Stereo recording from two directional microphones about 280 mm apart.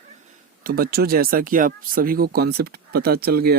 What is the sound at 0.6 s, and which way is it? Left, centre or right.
Speech, right.